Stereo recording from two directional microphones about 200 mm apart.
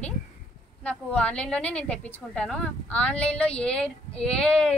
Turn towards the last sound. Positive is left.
turn(degrees=5)  # may be behind; listen again after turning